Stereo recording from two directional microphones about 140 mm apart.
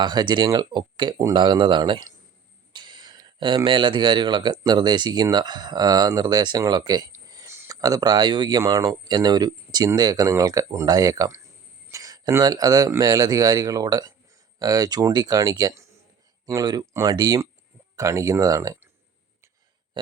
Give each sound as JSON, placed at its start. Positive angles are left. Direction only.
{"t": 0.0, "sound": "speech", "side_deg": -30}